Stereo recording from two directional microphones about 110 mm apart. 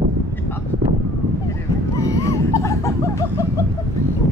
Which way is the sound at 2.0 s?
30° left (ahead or behind).